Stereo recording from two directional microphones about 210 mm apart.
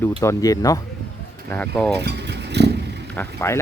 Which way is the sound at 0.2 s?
15° left (ahead or behind).